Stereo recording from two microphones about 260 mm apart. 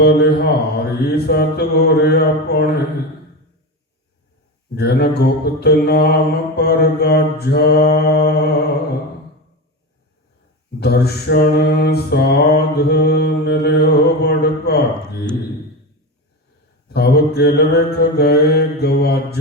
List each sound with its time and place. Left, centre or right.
0.5 s mantra: left
4.7 s mantra: left
10.8 s mantra: left
16.9 s mantra: left